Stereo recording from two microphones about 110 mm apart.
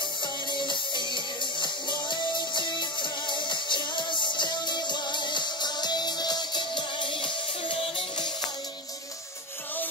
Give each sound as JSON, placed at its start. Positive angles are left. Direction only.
{"t": 0.2, "sound": "music", "side_deg": 45}